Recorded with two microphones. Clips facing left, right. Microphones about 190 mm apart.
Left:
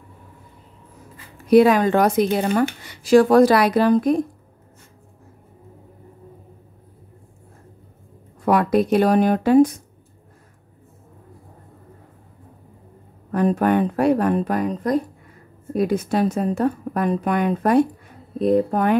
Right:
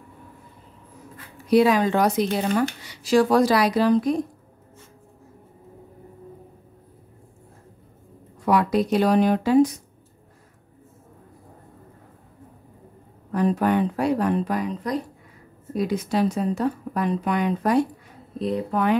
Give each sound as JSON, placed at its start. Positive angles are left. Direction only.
{"t": 1.5, "sound": "a woman's voice", "side_deg": 55}
{"t": 8.5, "sound": "a woman's voice", "side_deg": 55}
{"t": 13.3, "sound": "a woman's voice", "side_deg": 55}